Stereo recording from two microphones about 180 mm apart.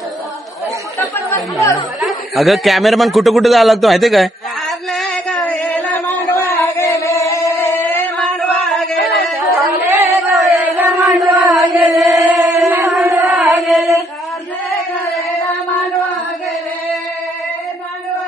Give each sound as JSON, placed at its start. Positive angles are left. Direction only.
{"t": 1.3, "sound": "speech", "side_deg": 15}
{"t": 2.0, "sound": "a sound", "side_deg": 0}
{"t": 5.9, "sound": "a sound", "side_deg": 15}
{"t": 8.2, "sound": "singing", "side_deg": 0}
{"t": 9.9, "sound": "a sound", "side_deg": -15}
{"t": 10.3, "sound": "chant", "side_deg": 0}
{"t": 10.9, "sound": "chant", "side_deg": -15}
{"t": 11.3, "sound": "chant", "side_deg": 0}
{"t": 12.2, "sound": "singing", "side_deg": 0}
{"t": 12.6, "sound": "singing", "side_deg": -15}
{"t": 13.2, "sound": "singing", "side_deg": 0}